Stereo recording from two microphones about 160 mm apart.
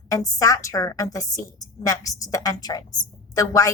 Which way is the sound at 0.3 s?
20° left (ahead or behind).